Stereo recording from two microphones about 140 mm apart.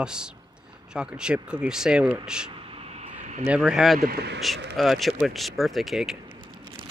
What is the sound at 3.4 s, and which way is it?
Speech, 5° right (ahead or behind).